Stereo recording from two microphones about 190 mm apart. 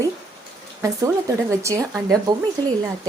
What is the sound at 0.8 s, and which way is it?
Speech, 15° right (ahead or behind).